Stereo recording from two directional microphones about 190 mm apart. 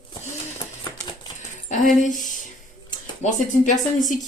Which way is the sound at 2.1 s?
40° left (ahead or behind).